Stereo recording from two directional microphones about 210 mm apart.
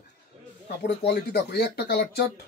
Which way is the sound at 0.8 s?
50° left (ahead or behind).